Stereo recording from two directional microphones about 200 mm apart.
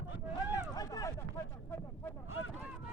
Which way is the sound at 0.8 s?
15° left (ahead or behind).